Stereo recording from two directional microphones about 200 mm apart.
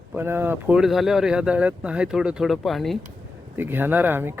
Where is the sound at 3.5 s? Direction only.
10° right (ahead or behind).